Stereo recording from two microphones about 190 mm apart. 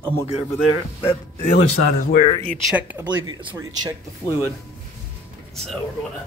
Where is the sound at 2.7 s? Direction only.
10° right (ahead or behind).